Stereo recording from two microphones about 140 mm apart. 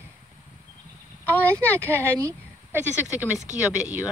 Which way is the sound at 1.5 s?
20° right (ahead or behind).